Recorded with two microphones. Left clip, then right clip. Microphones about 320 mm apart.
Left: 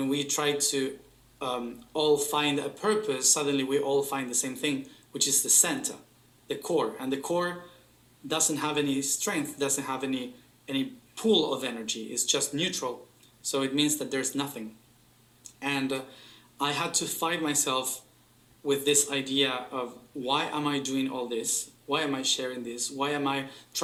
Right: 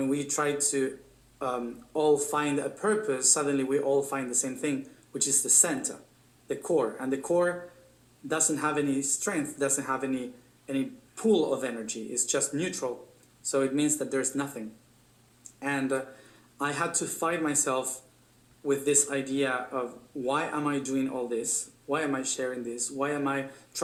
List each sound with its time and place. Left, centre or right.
0.0 s speech: centre